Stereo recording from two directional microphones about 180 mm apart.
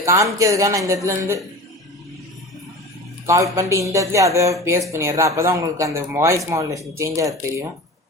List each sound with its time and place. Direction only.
0.0 s speech: 15° right (ahead or behind)
3.2 s speech: 15° right (ahead or behind)